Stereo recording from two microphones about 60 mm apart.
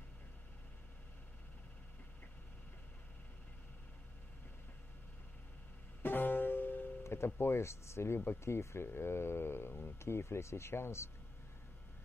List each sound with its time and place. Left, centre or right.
6.0 s music: left
7.0 s speech: left